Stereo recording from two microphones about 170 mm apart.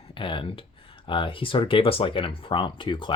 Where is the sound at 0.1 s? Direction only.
30° left (ahead or behind).